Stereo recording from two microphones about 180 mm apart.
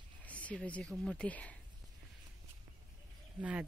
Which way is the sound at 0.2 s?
10° left (ahead or behind).